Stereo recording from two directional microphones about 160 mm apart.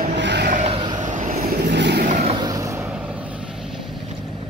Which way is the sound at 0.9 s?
50° right (ahead or behind).